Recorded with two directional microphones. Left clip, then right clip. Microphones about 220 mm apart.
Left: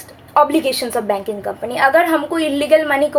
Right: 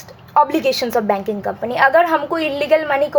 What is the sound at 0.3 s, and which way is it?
A woman's voice, 20° right (ahead or behind).